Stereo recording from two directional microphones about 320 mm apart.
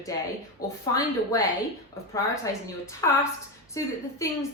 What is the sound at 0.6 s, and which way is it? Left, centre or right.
A woman's voice, centre.